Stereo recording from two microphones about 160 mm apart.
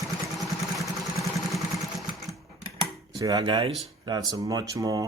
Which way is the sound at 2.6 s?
25° right (ahead or behind).